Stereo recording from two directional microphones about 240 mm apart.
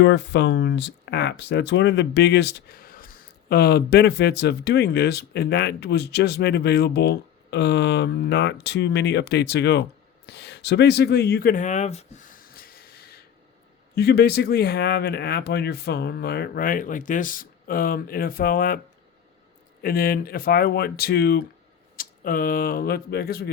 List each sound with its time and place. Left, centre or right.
0.0 s speech: left
10.2 s a sound: left
13.9 s speech: left
19.8 s speech: left